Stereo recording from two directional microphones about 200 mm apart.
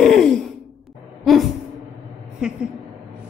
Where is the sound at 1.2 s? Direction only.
Centre (ahead or behind).